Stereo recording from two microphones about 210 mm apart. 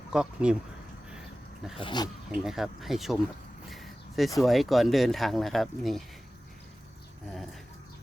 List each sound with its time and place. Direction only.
0.1 s speech: 5° right (ahead or behind)
1.8 s speech: 20° left (ahead or behind)
2.4 s speech: centre (ahead or behind)
3.7 s a sound: centre (ahead or behind)
4.4 s speech: centre (ahead or behind)